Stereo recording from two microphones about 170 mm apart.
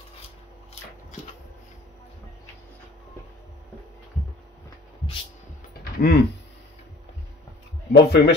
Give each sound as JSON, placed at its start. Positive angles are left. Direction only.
{"t": 5.9, "sound": "speech", "side_deg": 65}
{"t": 7.9, "sound": "speech", "side_deg": 75}